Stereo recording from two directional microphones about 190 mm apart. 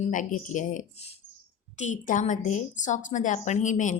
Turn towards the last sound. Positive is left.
turn(degrees=40)  # may be behind; listen again after turning